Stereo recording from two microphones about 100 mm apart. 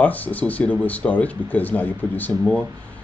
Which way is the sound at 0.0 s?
15° left (ahead or behind).